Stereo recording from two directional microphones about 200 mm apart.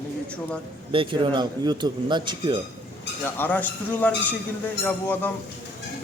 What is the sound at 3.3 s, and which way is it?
A man's voice, 10° left (ahead or behind).